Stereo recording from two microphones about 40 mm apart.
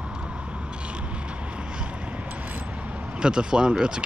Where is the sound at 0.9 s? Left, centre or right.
Right.